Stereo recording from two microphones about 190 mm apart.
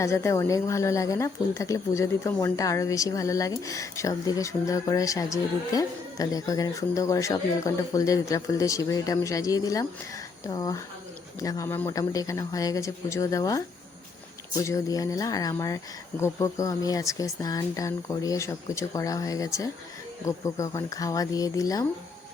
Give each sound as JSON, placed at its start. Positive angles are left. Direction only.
{"t": 0.0, "sound": "speech", "side_deg": 15}